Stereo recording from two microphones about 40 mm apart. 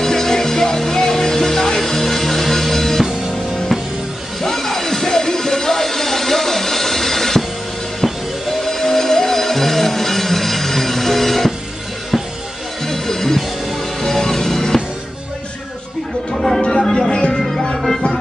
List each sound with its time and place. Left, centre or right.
0.0 s music: centre
4.4 s music: centre
12.8 s music: centre
16.3 s music: centre
17.4 s music: centre